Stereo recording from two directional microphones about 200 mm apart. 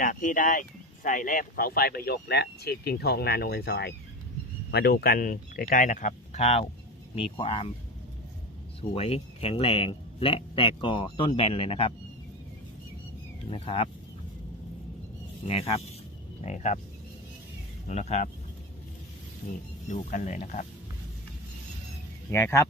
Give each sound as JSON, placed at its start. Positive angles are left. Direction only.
{"t": 0.0, "sound": "speech", "side_deg": 40}
{"t": 8.8, "sound": "speech", "side_deg": 30}
{"t": 13.5, "sound": "speech", "side_deg": 25}
{"t": 15.4, "sound": "speech", "side_deg": 30}
{"t": 17.8, "sound": "speech", "side_deg": 35}
{"t": 19.9, "sound": "speech", "side_deg": 40}
{"t": 22.3, "sound": "speech", "side_deg": 15}